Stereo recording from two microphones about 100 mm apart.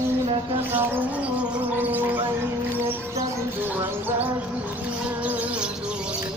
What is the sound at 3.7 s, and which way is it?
Music, 20° right (ahead or behind).